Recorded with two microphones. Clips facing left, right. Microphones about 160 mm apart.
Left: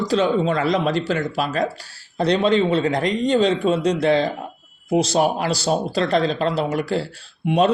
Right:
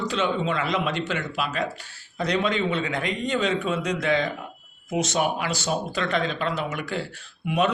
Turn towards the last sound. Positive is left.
turn(degrees=30)  # may be behind; listen again after turning